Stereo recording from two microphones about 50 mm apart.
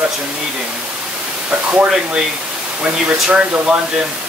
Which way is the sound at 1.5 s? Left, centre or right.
Right.